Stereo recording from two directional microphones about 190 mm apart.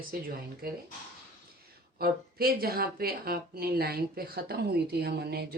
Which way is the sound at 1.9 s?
55° right (ahead or behind).